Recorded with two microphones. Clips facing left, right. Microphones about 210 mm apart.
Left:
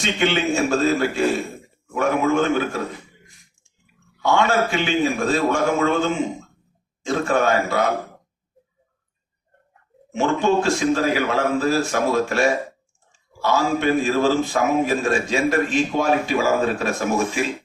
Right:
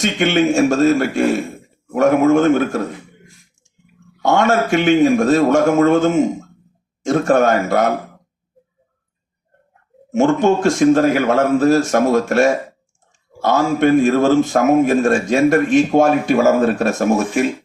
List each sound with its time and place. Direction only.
0.0 s a man's voice: 50° right (ahead or behind)
4.2 s speech: 45° right (ahead or behind)
10.1 s speech: 45° right (ahead or behind)